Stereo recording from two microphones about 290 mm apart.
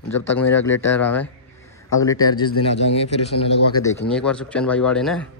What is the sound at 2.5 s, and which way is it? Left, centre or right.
Speech, left.